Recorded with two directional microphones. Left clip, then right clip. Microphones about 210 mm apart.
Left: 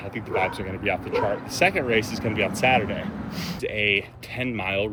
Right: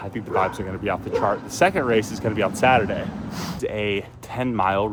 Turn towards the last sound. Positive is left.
turn(degrees=-55)  # may be behind; listen again after turning